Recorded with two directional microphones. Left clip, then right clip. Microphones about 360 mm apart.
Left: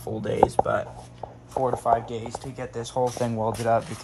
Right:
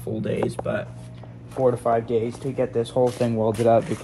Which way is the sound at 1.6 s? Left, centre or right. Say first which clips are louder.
Right 3 dB; centre.